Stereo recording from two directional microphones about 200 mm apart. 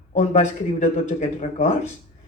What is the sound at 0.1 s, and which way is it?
Speech, 35° left (ahead or behind).